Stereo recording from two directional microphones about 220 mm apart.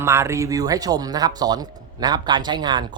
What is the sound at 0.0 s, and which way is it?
Speech, 10° right (ahead or behind).